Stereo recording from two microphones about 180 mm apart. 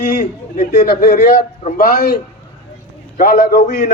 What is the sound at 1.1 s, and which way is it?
A man's voice, 50° left (ahead or behind).